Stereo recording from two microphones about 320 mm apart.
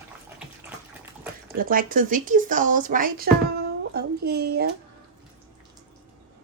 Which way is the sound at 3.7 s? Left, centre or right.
Right.